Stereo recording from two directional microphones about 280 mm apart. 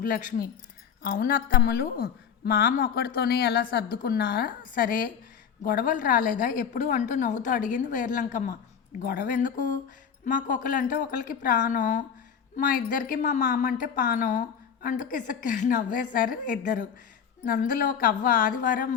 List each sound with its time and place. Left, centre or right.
0.0 s a woman's voice: left